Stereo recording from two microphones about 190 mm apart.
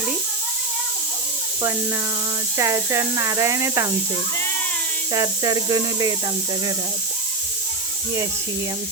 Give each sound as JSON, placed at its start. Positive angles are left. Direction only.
{"t": 2.6, "sound": "speech", "side_deg": -15}
{"t": 5.1, "sound": "speech", "side_deg": -20}